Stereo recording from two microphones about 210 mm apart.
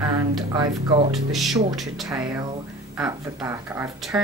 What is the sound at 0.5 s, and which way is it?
Speech, 20° right (ahead or behind).